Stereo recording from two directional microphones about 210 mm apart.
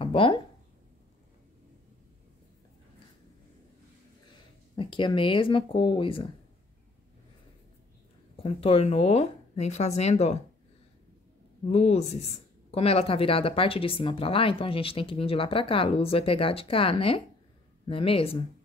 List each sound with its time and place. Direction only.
0.0 s a sound: 25° left (ahead or behind)
4.7 s speech: 25° left (ahead or behind)
8.4 s speech: 30° left (ahead or behind)
11.7 s speech: 30° left (ahead or behind)